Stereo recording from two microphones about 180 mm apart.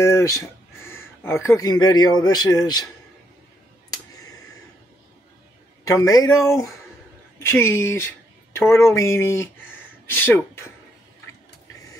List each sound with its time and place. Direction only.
0.0 s speech: 15° left (ahead or behind)
5.9 s speech: 20° left (ahead or behind)